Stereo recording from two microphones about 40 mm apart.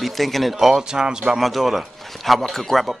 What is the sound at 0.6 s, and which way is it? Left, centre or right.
Speech, centre.